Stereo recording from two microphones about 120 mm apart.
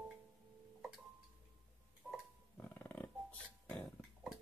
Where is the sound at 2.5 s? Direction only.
15° left (ahead or behind).